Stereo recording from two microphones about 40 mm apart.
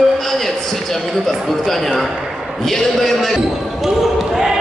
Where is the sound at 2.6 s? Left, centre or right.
Centre.